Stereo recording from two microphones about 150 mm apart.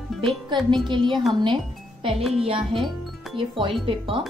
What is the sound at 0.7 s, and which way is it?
Speech, 30° right (ahead or behind).